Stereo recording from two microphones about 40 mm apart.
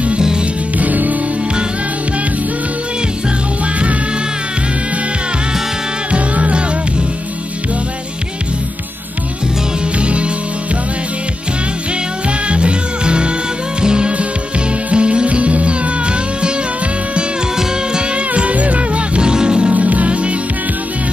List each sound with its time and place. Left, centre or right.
0.7 s music: right
6.1 s music: right
9.9 s music: right
12.4 s music: right
18.1 s music: right
19.7 s music: right